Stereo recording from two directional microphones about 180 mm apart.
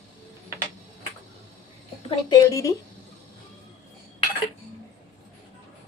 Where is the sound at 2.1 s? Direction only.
20° left (ahead or behind).